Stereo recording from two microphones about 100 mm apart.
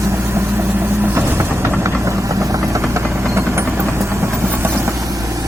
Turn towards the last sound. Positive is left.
turn(degrees=-25)  # may be behind; listen again after turning